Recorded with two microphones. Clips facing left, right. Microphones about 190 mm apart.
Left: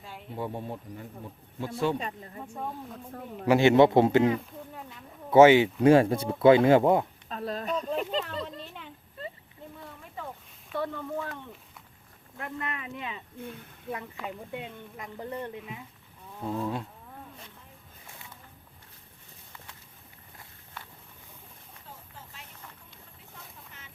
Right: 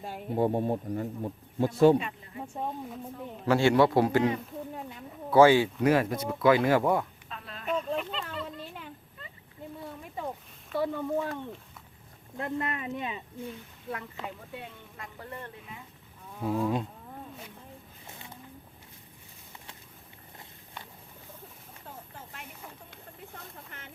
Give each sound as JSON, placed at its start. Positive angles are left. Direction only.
{"t": 0.0, "sound": "a man's voice", "side_deg": -45}
{"t": 2.0, "sound": "speech", "side_deg": 40}
{"t": 3.4, "sound": "speech", "side_deg": 15}
{"t": 5.3, "sound": "speech", "side_deg": 20}
{"t": 7.3, "sound": "a sound", "side_deg": 40}
{"t": 10.2, "sound": "a sound", "side_deg": -15}
{"t": 10.7, "sound": "speech", "side_deg": -10}
{"t": 12.4, "sound": "speech", "side_deg": -30}
{"t": 14.5, "sound": "speech", "side_deg": 20}
{"t": 16.4, "sound": "speech", "side_deg": -10}
{"t": 20.8, "sound": "a sound", "side_deg": -15}
{"t": 23.7, "sound": "a sound", "side_deg": -55}